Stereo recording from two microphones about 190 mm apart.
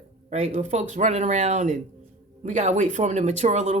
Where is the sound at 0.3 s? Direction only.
35° right (ahead or behind).